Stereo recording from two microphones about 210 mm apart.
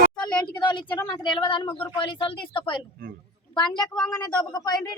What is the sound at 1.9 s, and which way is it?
A woman's voice, 25° left (ahead or behind).